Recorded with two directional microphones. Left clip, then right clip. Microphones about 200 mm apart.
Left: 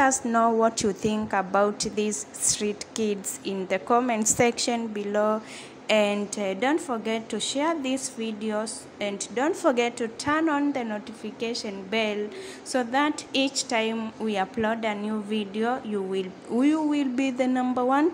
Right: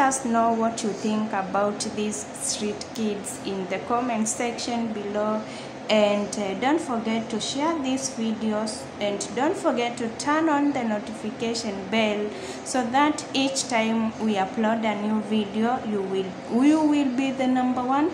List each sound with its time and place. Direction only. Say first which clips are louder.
0.0 s a woman's voice: even; 35° left (ahead or behind)